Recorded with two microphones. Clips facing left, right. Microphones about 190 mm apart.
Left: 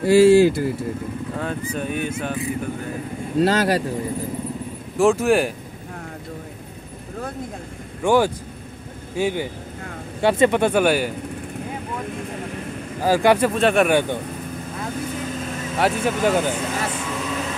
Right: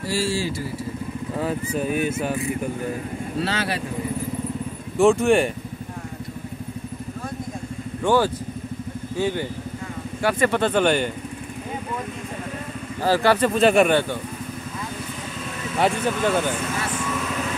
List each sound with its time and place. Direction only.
0.0 s speech: 60° left (ahead or behind)
1.8 s speech: 5° right (ahead or behind)
3.3 s speech: 45° left (ahead or behind)
4.9 s speech: centre (ahead or behind)
8.0 s speech: 15° left (ahead or behind)
13.0 s speech: 15° left (ahead or behind)
13.5 s speech: centre (ahead or behind)
15.8 s speech: 10° left (ahead or behind)